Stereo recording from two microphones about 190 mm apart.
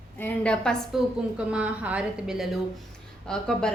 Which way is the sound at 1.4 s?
5° right (ahead or behind).